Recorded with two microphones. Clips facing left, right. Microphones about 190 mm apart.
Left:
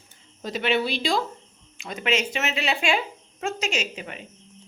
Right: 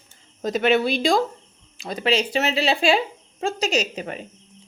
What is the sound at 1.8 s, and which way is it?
Speech, 35° right (ahead or behind).